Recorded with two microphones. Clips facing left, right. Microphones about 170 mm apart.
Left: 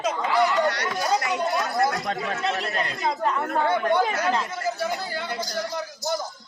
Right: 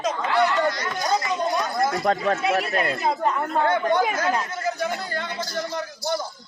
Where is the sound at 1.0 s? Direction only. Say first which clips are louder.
Right 1 dB; 10° left (ahead or behind).